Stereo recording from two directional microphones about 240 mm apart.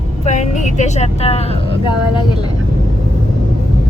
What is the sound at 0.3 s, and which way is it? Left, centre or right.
A woman's voice, left.